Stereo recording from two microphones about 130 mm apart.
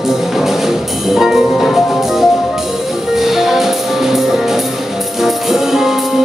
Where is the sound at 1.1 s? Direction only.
Centre (ahead or behind).